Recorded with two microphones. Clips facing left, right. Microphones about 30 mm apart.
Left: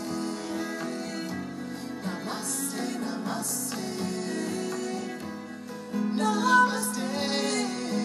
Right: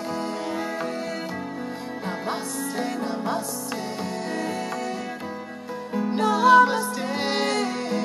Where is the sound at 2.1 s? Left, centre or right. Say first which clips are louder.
Right 6 dB; right.